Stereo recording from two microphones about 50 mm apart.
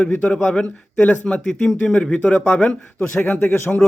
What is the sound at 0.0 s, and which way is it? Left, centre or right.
Speech, left.